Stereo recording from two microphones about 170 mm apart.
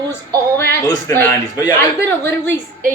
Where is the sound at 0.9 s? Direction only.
15° left (ahead or behind).